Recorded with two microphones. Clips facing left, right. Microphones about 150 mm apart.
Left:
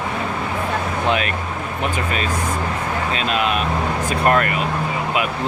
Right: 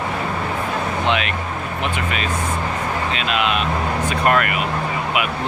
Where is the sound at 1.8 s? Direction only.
35° left (ahead or behind).